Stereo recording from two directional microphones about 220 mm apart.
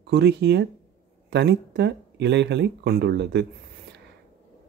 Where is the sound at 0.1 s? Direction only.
50° right (ahead or behind).